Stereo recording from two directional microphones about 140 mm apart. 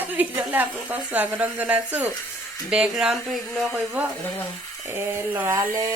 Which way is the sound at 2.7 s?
5° right (ahead or behind).